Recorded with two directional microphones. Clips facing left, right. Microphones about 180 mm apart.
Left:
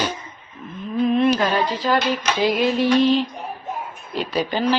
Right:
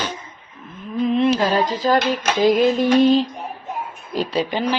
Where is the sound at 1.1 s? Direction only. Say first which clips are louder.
Right 1 dB; 25° right (ahead or behind).